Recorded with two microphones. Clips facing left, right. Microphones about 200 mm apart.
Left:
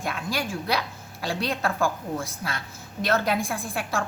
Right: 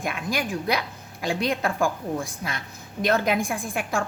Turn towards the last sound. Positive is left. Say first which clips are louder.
# right 2 dB
turn(degrees=-15)  # may be behind; listen again after turning